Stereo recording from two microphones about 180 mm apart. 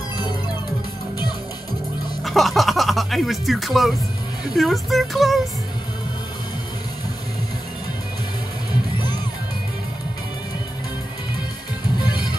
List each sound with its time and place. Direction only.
2.2 s speech: centre (ahead or behind)
12.0 s music: 25° left (ahead or behind)